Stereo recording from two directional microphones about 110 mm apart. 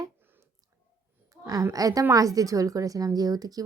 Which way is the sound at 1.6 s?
30° right (ahead or behind).